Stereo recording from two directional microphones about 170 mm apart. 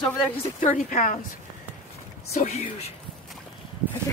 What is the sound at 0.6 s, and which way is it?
Speech, 50° left (ahead or behind).